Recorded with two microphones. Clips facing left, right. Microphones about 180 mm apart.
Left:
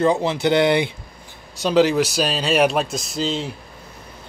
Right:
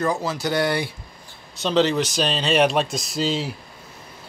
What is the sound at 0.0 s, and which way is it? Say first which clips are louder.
Speech: left 5 dB; 25° left (ahead or behind).